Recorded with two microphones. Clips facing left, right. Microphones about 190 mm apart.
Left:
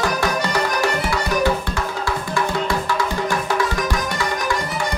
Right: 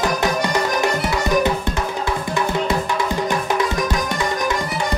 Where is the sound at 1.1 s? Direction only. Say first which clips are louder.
Right 1 dB; 20° right (ahead or behind).